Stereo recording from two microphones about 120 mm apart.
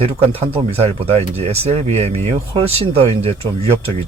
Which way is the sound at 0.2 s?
55° right (ahead or behind).